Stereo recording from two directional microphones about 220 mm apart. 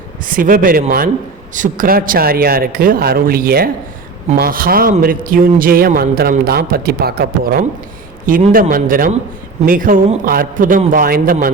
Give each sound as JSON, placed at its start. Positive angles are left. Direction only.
{"t": 0.3, "sound": "a man's voice", "side_deg": -40}